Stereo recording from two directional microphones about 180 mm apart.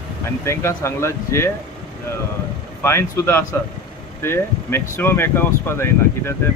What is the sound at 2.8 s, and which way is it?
Speech, 15° left (ahead or behind).